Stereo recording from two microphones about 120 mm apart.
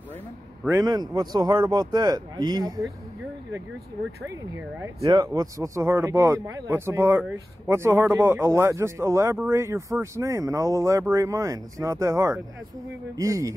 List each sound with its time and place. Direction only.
0.7 s speech: 30° right (ahead or behind)
4.6 s speech: 15° right (ahead or behind)
5.0 s speech: 30° right (ahead or behind)